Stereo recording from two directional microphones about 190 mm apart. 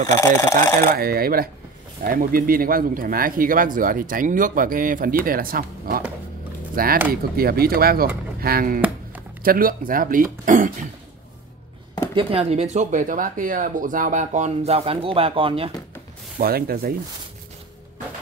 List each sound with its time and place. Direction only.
0.0 s speech: 15° left (ahead or behind)
0.8 s speech: 50° right (ahead or behind)
12.2 s speech: 30° right (ahead or behind)
16.3 s speech: 55° right (ahead or behind)